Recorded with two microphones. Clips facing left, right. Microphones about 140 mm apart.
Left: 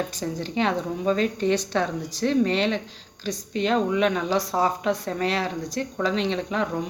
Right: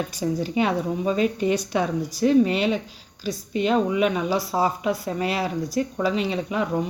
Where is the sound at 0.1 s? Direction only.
10° right (ahead or behind).